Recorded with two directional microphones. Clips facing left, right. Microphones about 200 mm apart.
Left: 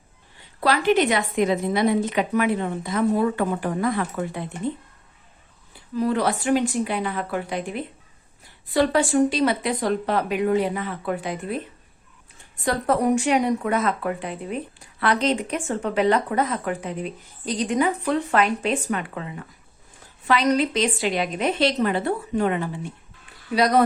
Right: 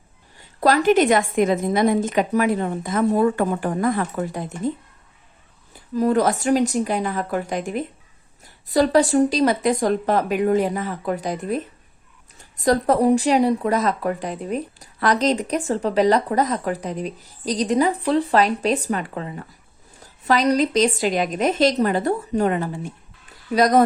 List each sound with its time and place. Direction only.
0.3 s a woman's voice: 45° right (ahead or behind)
5.7 s a woman's voice: 45° right (ahead or behind)